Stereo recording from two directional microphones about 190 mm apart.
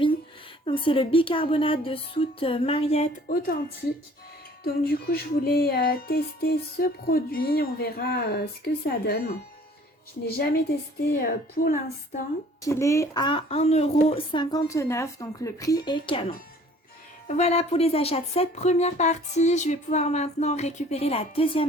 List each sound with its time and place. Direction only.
0.6 s speech: 25° left (ahead or behind)
3.2 s music: 50° left (ahead or behind)
4.6 s music: 55° left (ahead or behind)
11.3 s music: 50° left (ahead or behind)
12.6 s speech: 15° left (ahead or behind); by 14.4 s 35° left (ahead or behind)
14.5 s speech: 15° left (ahead or behind)